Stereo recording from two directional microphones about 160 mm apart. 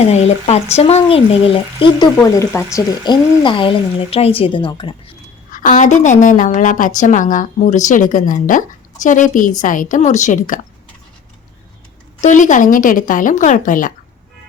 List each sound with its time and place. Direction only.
0.0 s speech: 40° left (ahead or behind)
2.1 s speech: 15° left (ahead or behind)
2.7 s speech: 30° left (ahead or behind)
5.5 s a woman's voice: 55° left (ahead or behind)
12.2 s speech: 50° left (ahead or behind)